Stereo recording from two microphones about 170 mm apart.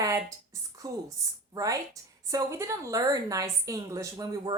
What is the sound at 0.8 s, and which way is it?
A woman's voice, 20° right (ahead or behind).